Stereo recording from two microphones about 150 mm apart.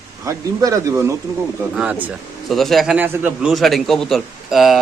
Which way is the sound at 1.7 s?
10° right (ahead or behind).